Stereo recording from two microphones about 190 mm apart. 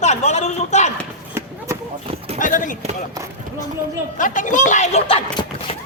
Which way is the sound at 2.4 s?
45° left (ahead or behind).